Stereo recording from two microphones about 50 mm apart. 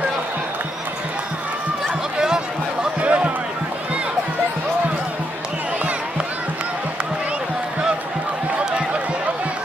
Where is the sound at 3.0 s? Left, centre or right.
Right.